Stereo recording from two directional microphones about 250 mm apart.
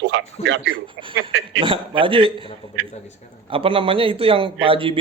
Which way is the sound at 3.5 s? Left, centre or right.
Right.